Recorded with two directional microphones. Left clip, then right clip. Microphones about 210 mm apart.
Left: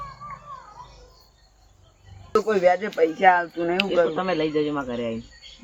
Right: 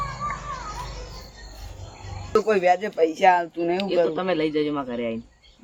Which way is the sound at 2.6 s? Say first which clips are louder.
Even; 30° right (ahead or behind).